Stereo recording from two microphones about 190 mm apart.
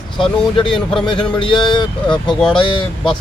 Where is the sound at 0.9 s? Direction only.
25° left (ahead or behind).